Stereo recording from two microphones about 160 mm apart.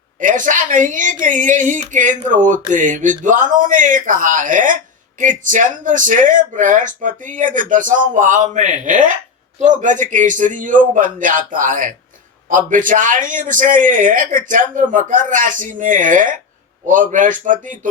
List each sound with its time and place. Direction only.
0.2 s a woman's voice: 55° right (ahead or behind)